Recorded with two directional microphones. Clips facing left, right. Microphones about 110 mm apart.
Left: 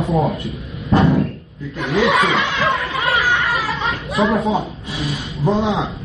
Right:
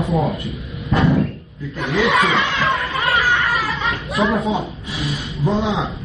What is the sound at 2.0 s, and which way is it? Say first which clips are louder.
Chatter: even; centre (ahead or behind).